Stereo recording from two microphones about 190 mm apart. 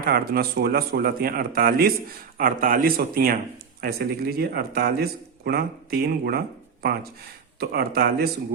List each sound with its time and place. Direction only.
0.0 s speech: 55° right (ahead or behind)